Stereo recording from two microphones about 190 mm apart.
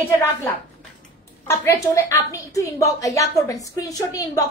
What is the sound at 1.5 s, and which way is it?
A woman's voice, 15° left (ahead or behind).